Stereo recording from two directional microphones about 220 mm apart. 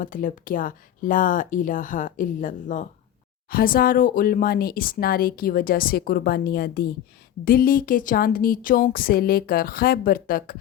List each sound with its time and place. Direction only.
0.0 s speech: 40° left (ahead or behind)